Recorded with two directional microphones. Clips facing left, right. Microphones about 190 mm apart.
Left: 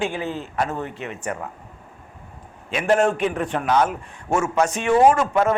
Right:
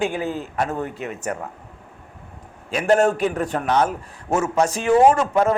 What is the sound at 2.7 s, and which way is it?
A man's voice, 40° right (ahead or behind).